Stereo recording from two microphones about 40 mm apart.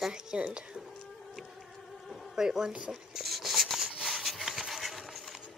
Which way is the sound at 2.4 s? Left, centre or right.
Centre.